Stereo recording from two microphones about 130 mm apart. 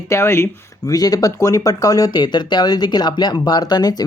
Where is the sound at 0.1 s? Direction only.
20° left (ahead or behind).